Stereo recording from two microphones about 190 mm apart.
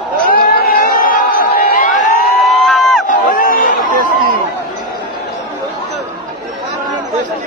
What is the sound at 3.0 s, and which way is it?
Crowd, 45° left (ahead or behind).